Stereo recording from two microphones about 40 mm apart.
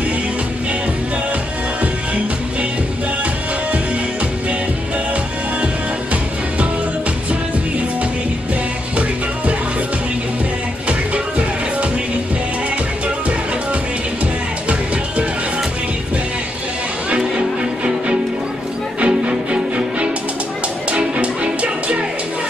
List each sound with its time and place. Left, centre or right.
10.9 s music: right
18.9 s music: right